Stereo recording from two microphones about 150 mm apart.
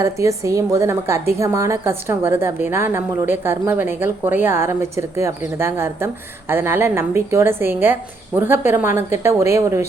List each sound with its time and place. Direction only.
0.0 s a woman's voice: 20° right (ahead or behind)